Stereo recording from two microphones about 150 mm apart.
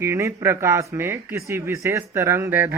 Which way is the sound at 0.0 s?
20° right (ahead or behind).